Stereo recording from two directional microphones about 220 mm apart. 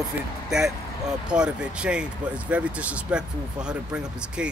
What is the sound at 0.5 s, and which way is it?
Speech, centre (ahead or behind).